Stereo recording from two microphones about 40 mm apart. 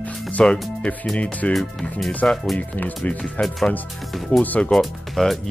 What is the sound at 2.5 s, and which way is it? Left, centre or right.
Speech, left.